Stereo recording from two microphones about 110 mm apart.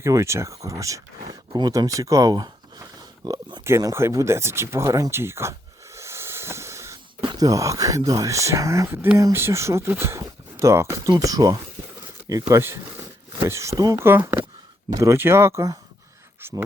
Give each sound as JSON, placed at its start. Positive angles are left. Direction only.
{"t": 0.0, "sound": "speech", "side_deg": -25}
{"t": 1.3, "sound": "speech", "side_deg": -40}
{"t": 13.9, "sound": "speech", "side_deg": -20}